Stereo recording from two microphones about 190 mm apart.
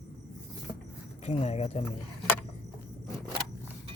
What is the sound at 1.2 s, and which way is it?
Speech, 35° left (ahead or behind).